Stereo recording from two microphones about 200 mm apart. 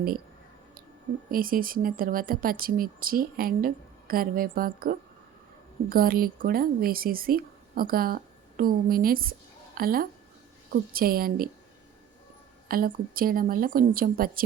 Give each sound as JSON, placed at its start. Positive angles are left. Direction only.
{"t": 1.3, "sound": "speech", "side_deg": -45}
{"t": 12.6, "sound": "speech", "side_deg": -45}